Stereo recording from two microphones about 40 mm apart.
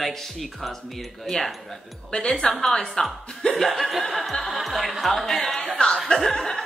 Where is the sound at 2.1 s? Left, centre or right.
Left.